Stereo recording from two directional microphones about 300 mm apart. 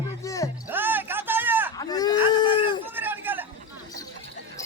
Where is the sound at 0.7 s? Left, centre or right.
Centre.